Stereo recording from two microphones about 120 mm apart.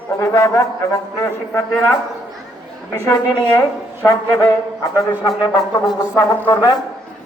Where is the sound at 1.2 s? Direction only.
15° left (ahead or behind).